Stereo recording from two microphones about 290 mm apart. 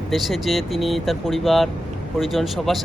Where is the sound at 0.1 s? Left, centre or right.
Centre.